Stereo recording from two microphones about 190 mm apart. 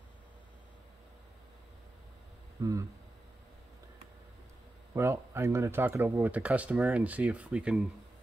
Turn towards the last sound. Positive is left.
turn(degrees=-5)  # may be behind; listen again after turning